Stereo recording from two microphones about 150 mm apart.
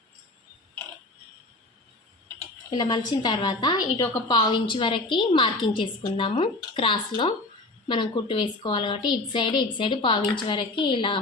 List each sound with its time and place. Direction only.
2.6 s a woman's voice: 30° left (ahead or behind)